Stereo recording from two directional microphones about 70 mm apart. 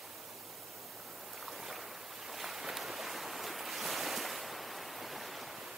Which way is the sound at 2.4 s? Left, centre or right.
Centre.